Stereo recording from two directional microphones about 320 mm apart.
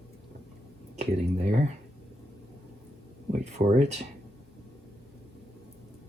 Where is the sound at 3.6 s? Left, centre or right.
Centre.